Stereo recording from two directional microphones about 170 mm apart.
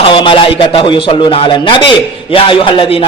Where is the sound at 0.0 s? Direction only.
30° left (ahead or behind).